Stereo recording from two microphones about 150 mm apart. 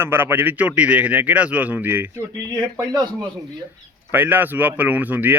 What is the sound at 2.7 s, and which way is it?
Speech, 25° right (ahead or behind).